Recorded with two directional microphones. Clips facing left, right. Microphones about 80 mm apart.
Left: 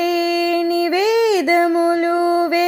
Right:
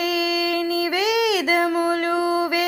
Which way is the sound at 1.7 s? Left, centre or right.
Centre.